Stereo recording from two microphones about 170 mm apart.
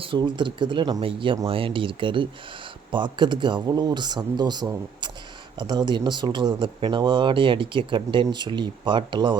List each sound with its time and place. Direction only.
0.0 s speech: 30° right (ahead or behind)